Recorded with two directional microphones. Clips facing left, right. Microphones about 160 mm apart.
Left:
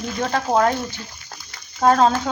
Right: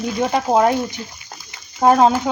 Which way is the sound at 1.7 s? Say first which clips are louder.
Right 3 dB; 15° right (ahead or behind).